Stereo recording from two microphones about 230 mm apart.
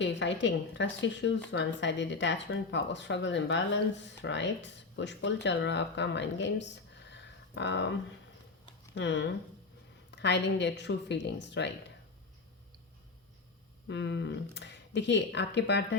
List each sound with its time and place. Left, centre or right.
0.0 s speech: left
7.1 s a sound: left
9.0 s speech: left
13.8 s speech: left